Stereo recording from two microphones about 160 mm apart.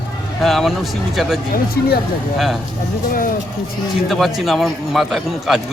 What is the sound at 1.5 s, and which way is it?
Speech, 70° left (ahead or behind).